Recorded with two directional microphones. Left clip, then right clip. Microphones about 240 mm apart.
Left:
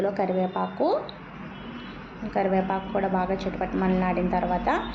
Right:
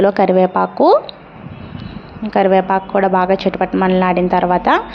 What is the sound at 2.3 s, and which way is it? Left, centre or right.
A woman's voice, right.